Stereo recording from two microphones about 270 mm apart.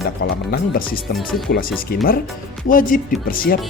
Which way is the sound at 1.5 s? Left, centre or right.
Left.